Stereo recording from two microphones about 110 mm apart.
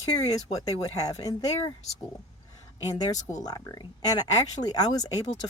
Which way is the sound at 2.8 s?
35° left (ahead or behind).